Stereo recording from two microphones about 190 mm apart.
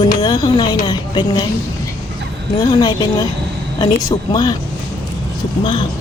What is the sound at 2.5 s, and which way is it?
Speech, 20° left (ahead or behind).